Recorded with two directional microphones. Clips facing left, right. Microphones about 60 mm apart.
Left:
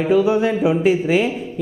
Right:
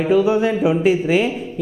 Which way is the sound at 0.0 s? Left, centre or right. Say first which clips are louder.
Even; centre.